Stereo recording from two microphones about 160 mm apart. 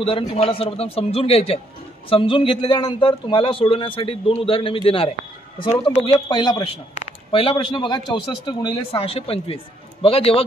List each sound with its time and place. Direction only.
0.3 s a man's voice: 35° left (ahead or behind)